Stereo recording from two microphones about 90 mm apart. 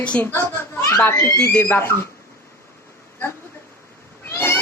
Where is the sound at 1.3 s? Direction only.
15° left (ahead or behind).